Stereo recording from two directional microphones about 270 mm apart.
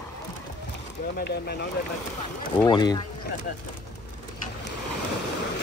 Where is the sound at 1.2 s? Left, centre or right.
Left.